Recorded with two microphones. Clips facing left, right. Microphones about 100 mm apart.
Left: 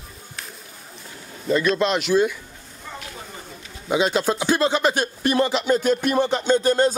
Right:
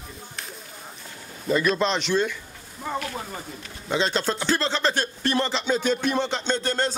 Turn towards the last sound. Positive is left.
turn(degrees=10)  # may be behind; listen again after turning